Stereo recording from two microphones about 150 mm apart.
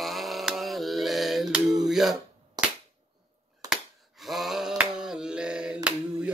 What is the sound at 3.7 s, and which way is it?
Finger snapping, centre (ahead or behind).